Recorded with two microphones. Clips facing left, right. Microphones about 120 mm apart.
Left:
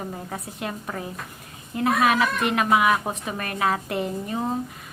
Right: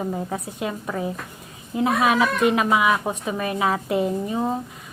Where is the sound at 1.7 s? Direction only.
20° right (ahead or behind).